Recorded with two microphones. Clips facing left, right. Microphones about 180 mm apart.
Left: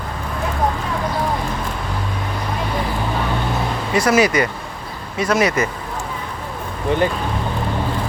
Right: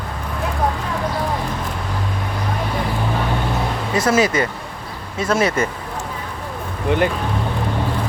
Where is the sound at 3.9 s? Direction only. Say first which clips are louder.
Left 1 dB; 25° right (ahead or behind).